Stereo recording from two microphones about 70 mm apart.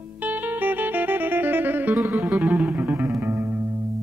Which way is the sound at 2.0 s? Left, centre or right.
Centre.